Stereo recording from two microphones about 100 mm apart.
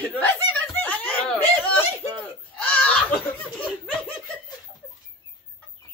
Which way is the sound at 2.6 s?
15° left (ahead or behind).